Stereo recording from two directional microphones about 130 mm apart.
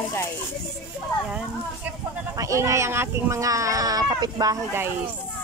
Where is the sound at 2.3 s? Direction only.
25° right (ahead or behind).